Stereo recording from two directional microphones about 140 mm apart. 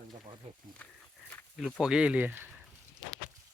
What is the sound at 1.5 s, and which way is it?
Speech, 5° right (ahead or behind).